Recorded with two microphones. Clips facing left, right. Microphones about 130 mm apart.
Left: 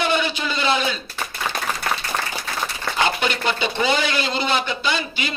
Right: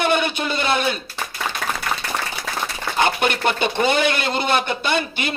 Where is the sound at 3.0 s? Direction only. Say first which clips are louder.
Right 2 dB; 55° right (ahead or behind).